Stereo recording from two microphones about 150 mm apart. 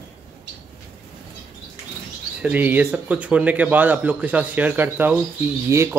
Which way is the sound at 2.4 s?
10° right (ahead or behind).